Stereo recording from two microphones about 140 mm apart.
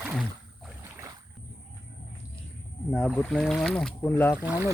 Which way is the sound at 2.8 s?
5° left (ahead or behind).